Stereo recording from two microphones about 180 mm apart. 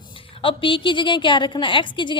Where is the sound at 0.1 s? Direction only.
30° left (ahead or behind).